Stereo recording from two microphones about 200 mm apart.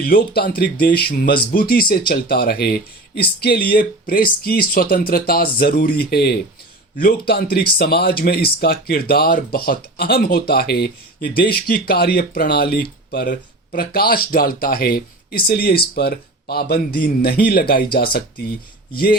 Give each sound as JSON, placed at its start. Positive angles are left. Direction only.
{"t": 0.0, "sound": "speech", "side_deg": 50}